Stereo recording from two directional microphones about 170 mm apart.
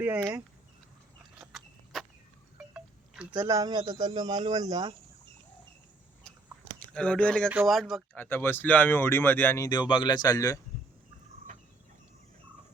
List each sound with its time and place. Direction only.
0.0 s speech: 10° right (ahead or behind)
1.2 s a sound: centre (ahead or behind)
3.4 s speech: 20° right (ahead or behind)
6.9 s speech: 5° left (ahead or behind)
7.4 s speech: 5° right (ahead or behind)
8.1 s speech: 10° left (ahead or behind)
9.6 s speech: 25° left (ahead or behind)